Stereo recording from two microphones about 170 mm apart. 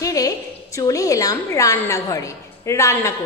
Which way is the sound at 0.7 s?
20° left (ahead or behind).